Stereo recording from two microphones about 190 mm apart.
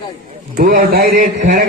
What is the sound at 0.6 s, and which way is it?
A man's voice, 55° right (ahead or behind).